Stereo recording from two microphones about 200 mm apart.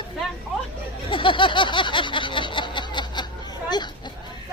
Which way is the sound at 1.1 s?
25° left (ahead or behind).